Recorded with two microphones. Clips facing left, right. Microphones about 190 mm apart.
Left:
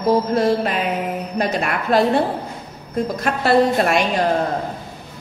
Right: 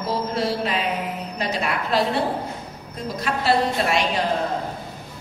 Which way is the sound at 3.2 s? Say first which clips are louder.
Left 4 dB; 50° left (ahead or behind).